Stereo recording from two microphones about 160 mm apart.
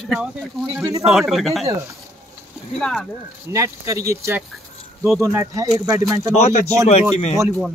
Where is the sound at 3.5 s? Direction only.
20° right (ahead or behind).